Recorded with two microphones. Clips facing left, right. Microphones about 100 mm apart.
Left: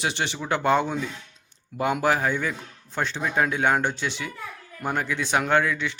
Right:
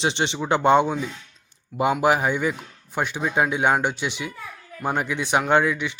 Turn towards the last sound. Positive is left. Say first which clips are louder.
# right 2 dB
turn(degrees=-15)  # may be behind; listen again after turning